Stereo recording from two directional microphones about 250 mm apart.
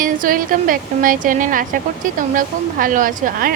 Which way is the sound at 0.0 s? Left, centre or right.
Right.